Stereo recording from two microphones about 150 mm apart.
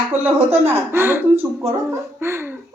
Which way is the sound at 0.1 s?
15° right (ahead or behind).